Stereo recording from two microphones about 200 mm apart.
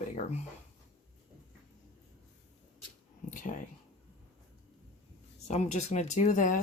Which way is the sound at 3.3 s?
40° left (ahead or behind).